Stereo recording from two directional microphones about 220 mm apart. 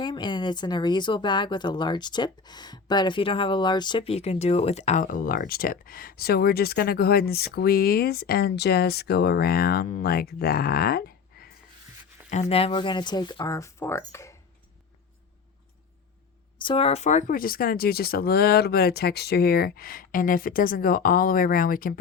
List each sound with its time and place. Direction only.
0.0 s speech: 20° left (ahead or behind); by 11.5 s 45° left (ahead or behind)
12.3 s speech: 30° left (ahead or behind); by 14.3 s 15° left (ahead or behind)
16.6 s speech: 25° left (ahead or behind); by 21.9 s 40° left (ahead or behind)